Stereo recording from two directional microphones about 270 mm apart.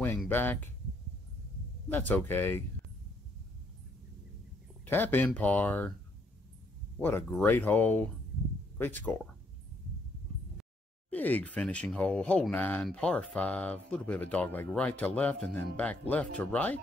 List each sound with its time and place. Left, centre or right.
0.0 s a sound: centre
1.9 s speech: centre
4.8 s speech: centre
7.0 s speech: centre
11.1 s speech: centre